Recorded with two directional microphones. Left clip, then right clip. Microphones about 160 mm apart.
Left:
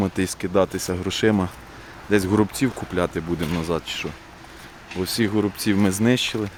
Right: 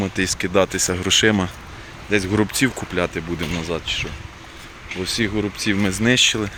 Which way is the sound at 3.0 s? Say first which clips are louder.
Right 1 dB; 25° left (ahead or behind).